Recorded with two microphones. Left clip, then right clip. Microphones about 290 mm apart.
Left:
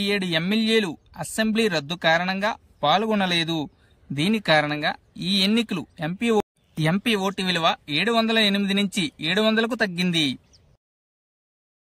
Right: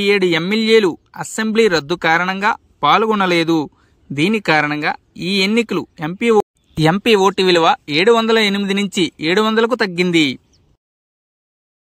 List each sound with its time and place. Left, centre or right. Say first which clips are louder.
0.0 s speech: right 9 dB; centre